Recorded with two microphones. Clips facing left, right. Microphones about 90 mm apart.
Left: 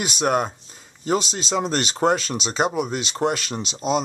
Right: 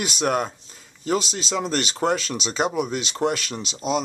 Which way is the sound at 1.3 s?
40° left (ahead or behind).